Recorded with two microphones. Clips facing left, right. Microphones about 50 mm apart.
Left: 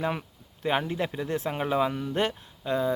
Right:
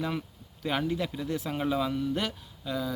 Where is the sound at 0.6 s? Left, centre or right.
Left.